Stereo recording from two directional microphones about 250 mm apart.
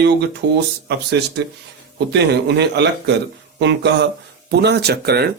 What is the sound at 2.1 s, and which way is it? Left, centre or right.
Speech, right.